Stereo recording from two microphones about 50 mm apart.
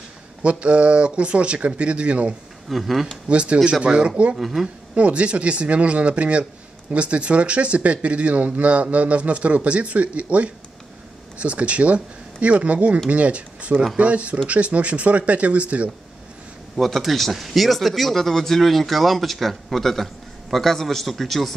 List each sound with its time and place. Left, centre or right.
0.4 s speech: right
2.7 s speech: centre
3.3 s speech: right
4.4 s speech: centre
4.9 s speech: right
16.7 s speech: centre